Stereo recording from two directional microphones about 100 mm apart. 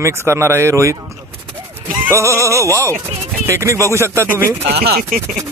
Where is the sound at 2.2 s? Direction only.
30° right (ahead or behind).